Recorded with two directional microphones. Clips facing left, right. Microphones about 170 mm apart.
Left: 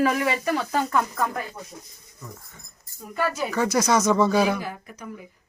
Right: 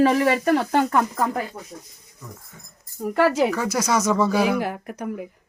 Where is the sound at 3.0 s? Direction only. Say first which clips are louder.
Right 8 dB; 75° right (ahead or behind).